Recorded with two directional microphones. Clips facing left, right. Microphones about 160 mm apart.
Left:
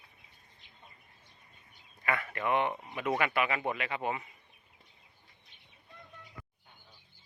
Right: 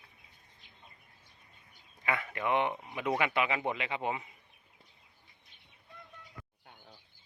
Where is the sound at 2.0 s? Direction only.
15° right (ahead or behind).